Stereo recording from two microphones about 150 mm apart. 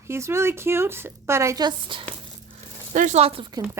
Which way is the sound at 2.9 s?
55° right (ahead or behind).